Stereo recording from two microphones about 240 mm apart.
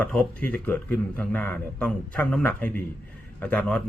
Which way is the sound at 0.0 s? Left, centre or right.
Centre.